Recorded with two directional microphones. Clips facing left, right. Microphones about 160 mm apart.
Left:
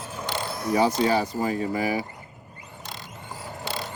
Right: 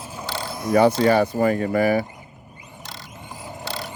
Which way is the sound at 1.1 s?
60° right (ahead or behind).